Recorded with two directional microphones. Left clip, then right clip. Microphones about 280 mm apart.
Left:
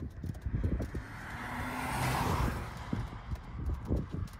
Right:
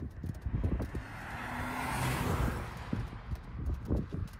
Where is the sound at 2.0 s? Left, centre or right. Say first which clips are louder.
Left 2 dB; centre.